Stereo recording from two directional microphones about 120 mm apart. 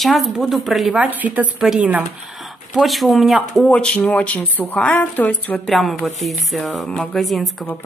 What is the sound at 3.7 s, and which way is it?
A woman's voice, 10° left (ahead or behind).